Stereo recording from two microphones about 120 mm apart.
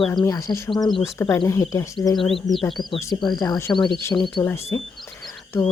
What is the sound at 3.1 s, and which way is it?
Speech, 35° left (ahead or behind).